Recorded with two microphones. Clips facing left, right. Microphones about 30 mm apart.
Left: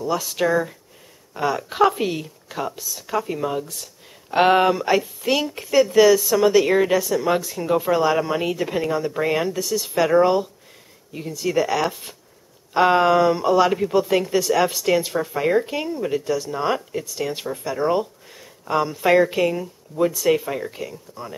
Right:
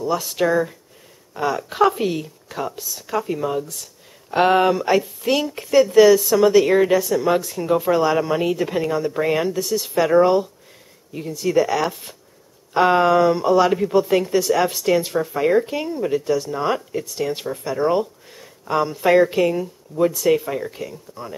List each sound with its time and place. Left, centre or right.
0.2 s speech: centre
3.7 s a sound: centre
4.6 s speech: centre